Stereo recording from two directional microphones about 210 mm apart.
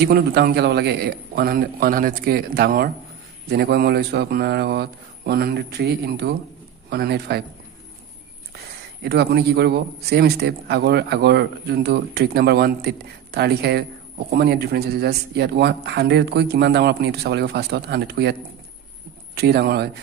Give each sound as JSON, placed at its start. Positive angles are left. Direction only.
{"t": 0.0, "sound": "speech", "side_deg": -50}
{"t": 9.0, "sound": "speech", "side_deg": -50}